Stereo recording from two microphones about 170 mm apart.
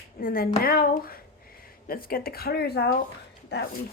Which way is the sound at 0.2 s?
55° left (ahead or behind).